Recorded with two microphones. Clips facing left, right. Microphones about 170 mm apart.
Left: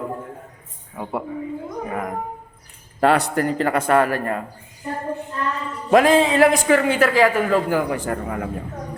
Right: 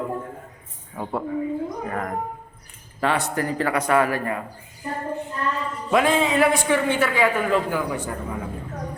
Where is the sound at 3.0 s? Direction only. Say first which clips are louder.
Left 6 dB; 35° left (ahead or behind).